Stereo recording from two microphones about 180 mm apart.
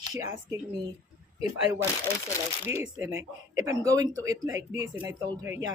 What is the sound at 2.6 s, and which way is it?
Speech, 15° right (ahead or behind).